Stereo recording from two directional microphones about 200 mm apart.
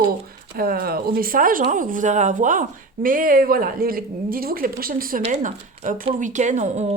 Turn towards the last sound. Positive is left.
turn(degrees=-35)  # may be behind; listen again after turning